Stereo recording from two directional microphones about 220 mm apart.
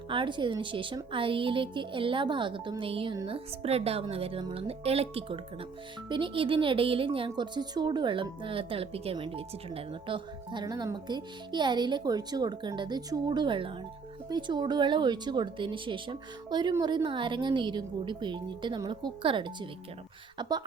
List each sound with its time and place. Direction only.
0.1 s speech: 20° right (ahead or behind)